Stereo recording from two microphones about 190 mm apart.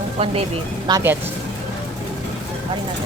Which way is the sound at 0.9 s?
20° right (ahead or behind).